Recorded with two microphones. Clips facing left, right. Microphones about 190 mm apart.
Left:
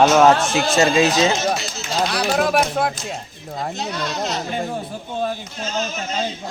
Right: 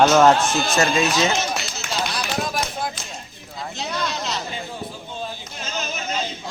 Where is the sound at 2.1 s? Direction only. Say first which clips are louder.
Left 7 dB; 65° left (ahead or behind).